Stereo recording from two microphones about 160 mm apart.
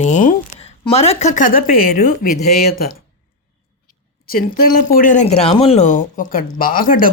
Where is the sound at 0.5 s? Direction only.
40° left (ahead or behind); by 2.3 s 60° left (ahead or behind).